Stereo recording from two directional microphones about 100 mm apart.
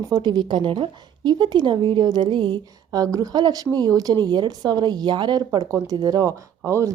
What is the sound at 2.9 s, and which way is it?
Speech, 35° right (ahead or behind).